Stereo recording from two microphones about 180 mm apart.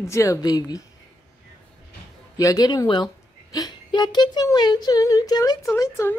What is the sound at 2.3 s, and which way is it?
Speech, 20° left (ahead or behind).